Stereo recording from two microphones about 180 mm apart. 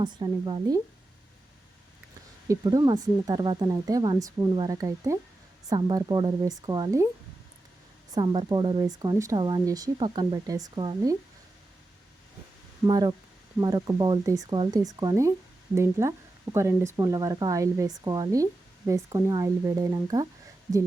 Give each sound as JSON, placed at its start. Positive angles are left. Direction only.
{"t": 0.0, "sound": "speech", "side_deg": -25}
{"t": 2.5, "sound": "speech", "side_deg": -20}
{"t": 8.1, "sound": "speech", "side_deg": -25}
{"t": 12.8, "sound": "speech", "side_deg": -20}